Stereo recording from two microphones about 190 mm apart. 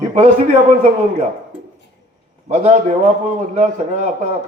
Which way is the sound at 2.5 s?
35° right (ahead or behind).